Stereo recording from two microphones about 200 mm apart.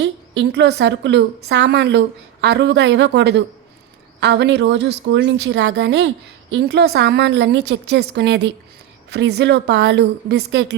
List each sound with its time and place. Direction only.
0.0 s a woman's voice: 60° right (ahead or behind)